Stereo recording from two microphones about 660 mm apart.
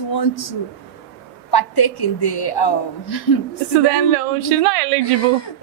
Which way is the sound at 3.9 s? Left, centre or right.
Right.